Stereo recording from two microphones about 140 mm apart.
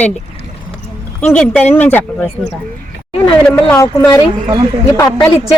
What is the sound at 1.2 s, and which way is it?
Speech, 10° left (ahead or behind).